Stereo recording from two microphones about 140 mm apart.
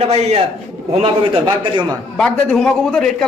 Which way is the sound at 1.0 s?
40° right (ahead or behind).